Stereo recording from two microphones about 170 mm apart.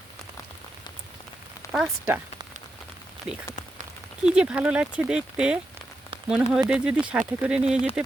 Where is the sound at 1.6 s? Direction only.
15° left (ahead or behind).